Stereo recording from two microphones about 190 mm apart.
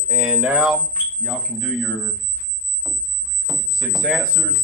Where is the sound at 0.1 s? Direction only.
5° right (ahead or behind).